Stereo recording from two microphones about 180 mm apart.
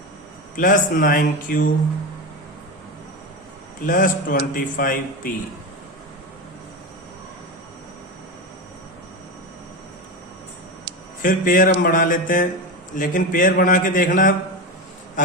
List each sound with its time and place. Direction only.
0.5 s a man's voice: 50° left (ahead or behind)
3.8 s a man's voice: 50° left (ahead or behind)
11.2 s a man's voice: 50° left (ahead or behind)